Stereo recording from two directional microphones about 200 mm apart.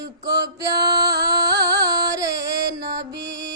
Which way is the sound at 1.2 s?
20° right (ahead or behind).